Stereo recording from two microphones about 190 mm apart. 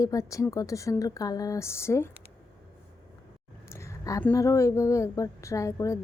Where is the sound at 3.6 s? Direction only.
15° left (ahead or behind).